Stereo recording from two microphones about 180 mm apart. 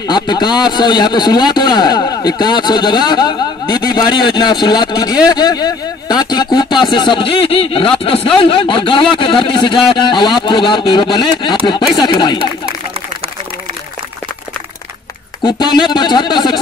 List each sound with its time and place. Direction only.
0.0 s a man's voice: 25° left (ahead or behind)
15.4 s a man's voice: 25° left (ahead or behind)